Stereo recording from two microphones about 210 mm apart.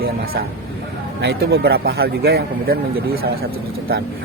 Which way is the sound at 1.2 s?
50° right (ahead or behind).